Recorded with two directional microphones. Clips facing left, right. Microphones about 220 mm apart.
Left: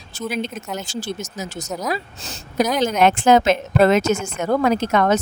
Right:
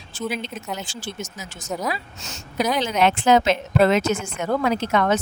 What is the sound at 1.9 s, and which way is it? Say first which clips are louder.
A woman's voice: left 6 dB; 40° left (ahead or behind).